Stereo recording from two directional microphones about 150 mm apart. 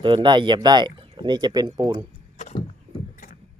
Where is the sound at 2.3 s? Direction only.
50° left (ahead or behind).